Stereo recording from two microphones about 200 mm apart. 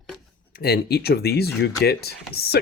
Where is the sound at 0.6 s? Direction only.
55° left (ahead or behind).